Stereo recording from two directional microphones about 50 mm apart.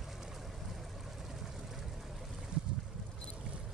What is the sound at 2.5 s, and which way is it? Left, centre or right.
Boat, centre.